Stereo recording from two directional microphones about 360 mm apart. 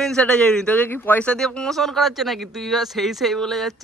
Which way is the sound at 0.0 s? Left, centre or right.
Centre.